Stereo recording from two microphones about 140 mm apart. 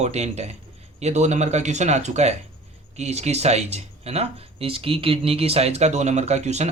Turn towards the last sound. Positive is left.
turn(degrees=-55)  # may be behind; listen again after turning